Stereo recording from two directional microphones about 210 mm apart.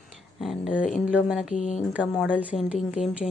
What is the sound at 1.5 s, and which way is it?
Speech, 35° left (ahead or behind).